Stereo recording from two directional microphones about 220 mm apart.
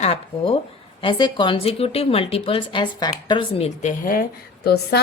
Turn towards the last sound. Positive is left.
turn(degrees=45)  # may be behind; listen again after turning